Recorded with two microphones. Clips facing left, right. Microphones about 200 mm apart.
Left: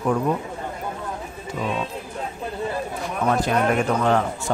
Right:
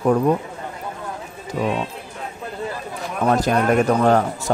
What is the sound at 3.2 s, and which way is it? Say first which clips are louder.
Speech: right 3 dB; 30° right (ahead or behind).